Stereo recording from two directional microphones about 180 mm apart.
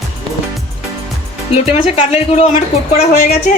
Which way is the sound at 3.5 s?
50° left (ahead or behind).